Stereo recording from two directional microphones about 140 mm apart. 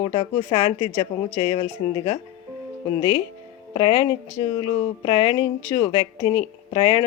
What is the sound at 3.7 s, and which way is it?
Speech, 35° left (ahead or behind).